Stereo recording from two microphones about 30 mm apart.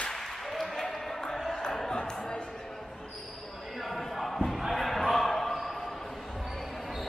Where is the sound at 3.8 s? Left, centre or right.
Centre.